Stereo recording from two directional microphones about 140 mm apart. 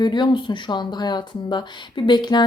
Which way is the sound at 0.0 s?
35° left (ahead or behind).